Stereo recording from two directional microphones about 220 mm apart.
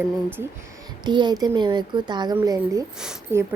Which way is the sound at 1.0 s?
20° right (ahead or behind).